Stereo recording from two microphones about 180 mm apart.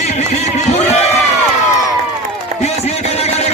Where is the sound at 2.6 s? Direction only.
35° left (ahead or behind).